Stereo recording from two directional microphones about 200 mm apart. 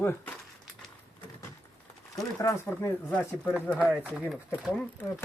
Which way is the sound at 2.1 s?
15° left (ahead or behind).